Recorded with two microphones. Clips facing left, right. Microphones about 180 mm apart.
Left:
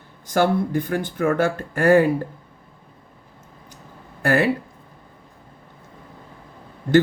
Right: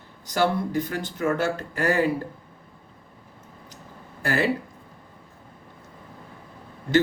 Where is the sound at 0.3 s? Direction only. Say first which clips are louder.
Left 4 dB; 50° left (ahead or behind).